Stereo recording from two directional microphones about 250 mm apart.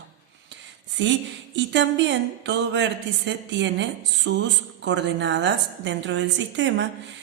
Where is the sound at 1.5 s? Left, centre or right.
Right.